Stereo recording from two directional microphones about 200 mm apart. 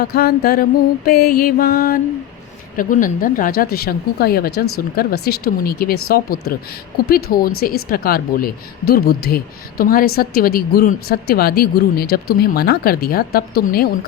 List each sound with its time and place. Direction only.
0.0 s a woman's voice: 50° left (ahead or behind)
7.9 s a woman's voice: 45° left (ahead or behind)